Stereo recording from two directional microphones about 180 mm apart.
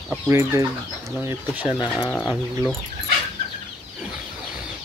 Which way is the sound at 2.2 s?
10° right (ahead or behind).